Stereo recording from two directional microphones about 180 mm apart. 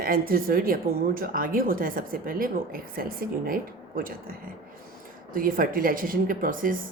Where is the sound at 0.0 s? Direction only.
55° right (ahead or behind).